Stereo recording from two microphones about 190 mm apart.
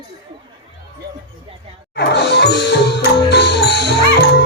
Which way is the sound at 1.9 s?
60° left (ahead or behind).